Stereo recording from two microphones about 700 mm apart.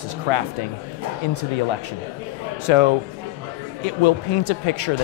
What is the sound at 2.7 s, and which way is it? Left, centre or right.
Speech, left.